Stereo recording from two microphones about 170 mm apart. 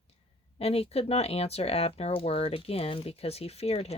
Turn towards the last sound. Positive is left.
turn(degrees=35)  # may be behind; listen again after turning